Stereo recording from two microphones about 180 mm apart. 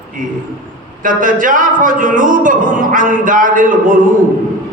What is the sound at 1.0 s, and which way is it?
A man's voice, 50° right (ahead or behind).